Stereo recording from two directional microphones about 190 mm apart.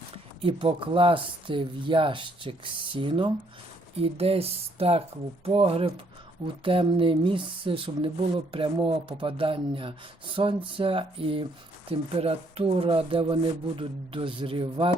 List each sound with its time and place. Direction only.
0.4 s speech: 25° right (ahead or behind)